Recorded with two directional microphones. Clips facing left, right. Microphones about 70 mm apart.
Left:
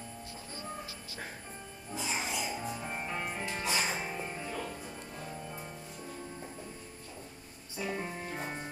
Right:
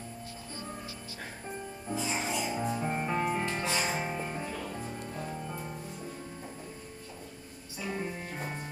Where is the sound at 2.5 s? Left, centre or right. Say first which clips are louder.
Right 6 dB; right.